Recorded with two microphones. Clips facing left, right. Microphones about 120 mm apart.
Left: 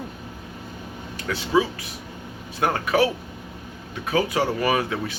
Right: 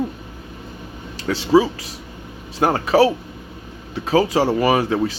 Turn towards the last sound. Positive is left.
turn(degrees=-30)  # may be behind; listen again after turning